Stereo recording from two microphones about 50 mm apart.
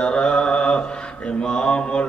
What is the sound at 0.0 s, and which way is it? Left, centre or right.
Mantra, centre.